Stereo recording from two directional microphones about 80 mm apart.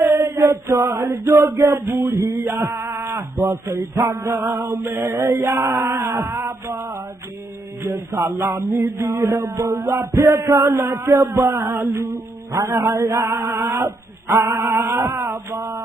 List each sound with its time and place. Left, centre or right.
0.0 s male singing: right
3.4 s music: right